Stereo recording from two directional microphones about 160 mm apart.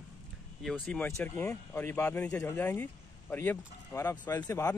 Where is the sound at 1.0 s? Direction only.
15° left (ahead or behind).